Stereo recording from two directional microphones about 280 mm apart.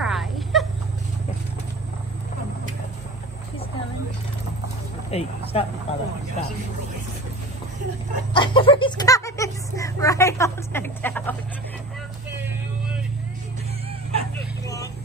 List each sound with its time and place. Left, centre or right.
0.0 s a sound: centre
5.1 s speech: left
8.3 s speech: centre
14.3 s vehicle: centre